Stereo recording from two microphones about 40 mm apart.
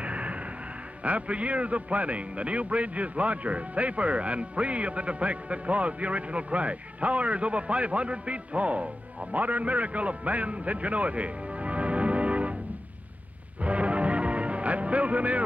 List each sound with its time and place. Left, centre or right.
0.0 s a sound: right
1.0 s a man's voice: right
13.6 s music: right